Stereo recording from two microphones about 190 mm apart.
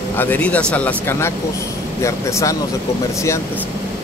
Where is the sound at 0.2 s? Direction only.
10° left (ahead or behind).